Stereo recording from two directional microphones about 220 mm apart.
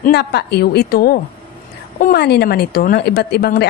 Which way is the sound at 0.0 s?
45° left (ahead or behind).